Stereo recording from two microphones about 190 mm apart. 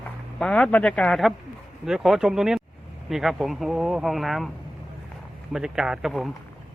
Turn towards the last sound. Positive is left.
turn(degrees=0)  # may be behind; listen again after turning